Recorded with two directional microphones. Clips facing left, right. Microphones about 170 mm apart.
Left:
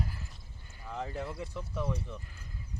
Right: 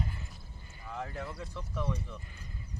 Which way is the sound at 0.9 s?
20° left (ahead or behind).